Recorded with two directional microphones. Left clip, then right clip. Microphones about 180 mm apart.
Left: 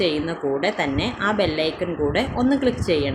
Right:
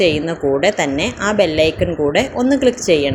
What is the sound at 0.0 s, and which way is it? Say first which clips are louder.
Speech: right 7 dB; 15° right (ahead or behind).